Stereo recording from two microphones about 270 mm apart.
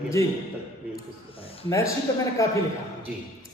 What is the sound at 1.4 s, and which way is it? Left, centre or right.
A man's voice, centre.